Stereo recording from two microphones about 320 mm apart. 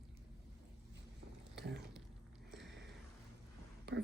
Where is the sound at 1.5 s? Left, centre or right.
Right.